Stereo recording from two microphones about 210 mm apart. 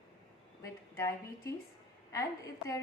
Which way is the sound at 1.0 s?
15° left (ahead or behind).